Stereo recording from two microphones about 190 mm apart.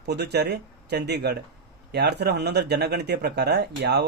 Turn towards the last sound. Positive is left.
turn(degrees=-60)  # may be behind; listen again after turning